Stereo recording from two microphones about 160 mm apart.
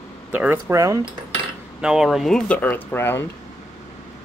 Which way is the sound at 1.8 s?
5° right (ahead or behind).